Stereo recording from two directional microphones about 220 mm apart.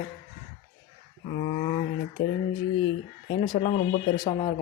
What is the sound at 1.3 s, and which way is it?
Speech, 25° left (ahead or behind).